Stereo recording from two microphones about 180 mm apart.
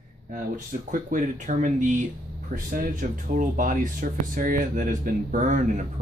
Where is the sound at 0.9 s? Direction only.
45° right (ahead or behind).